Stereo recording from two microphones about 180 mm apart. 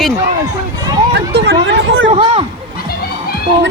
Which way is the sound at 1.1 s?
65° right (ahead or behind).